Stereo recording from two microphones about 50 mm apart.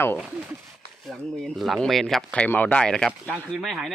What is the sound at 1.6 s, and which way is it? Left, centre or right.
Speech, centre.